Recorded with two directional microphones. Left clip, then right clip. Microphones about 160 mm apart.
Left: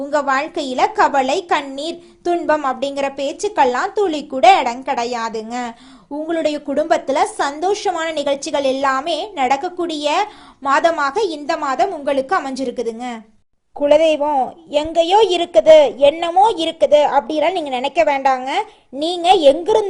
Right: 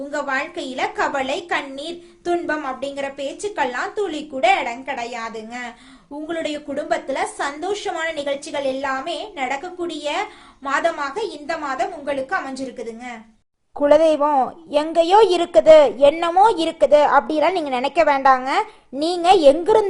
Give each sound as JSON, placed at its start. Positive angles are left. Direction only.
{"t": 0.1, "sound": "a woman's voice", "side_deg": 30}
{"t": 6.2, "sound": "a woman's voice", "side_deg": 25}
{"t": 13.9, "sound": "a woman's voice", "side_deg": 0}